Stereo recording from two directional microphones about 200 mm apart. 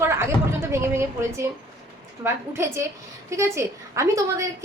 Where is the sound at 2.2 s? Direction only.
15° right (ahead or behind).